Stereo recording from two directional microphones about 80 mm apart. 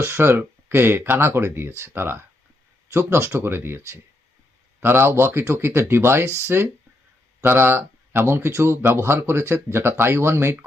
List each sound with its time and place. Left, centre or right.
0.0 s speech: right